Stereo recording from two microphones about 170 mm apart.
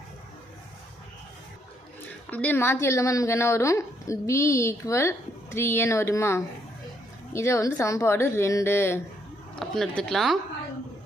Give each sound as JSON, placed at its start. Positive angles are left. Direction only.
{"t": 2.3, "sound": "a woman's voice", "side_deg": 10}
{"t": 9.6, "sound": "speech", "side_deg": 5}